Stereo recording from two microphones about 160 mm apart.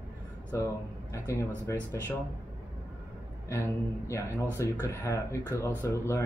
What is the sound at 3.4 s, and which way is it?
Speech, 15° left (ahead or behind).